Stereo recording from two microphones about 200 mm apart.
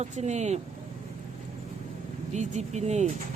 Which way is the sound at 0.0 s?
35° right (ahead or behind).